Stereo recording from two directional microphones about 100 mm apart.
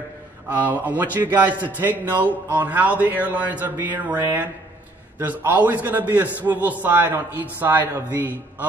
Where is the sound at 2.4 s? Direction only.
20° right (ahead or behind).